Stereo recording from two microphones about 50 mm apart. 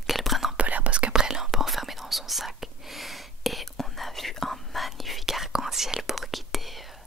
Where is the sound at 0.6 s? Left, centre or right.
Right.